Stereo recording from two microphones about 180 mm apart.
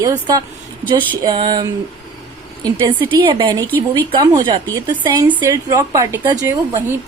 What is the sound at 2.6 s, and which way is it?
A woman's voice, 25° right (ahead or behind).